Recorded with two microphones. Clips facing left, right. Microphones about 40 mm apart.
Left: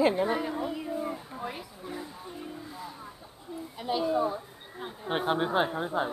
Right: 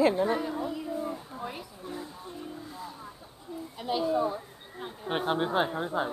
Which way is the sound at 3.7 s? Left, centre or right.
Centre.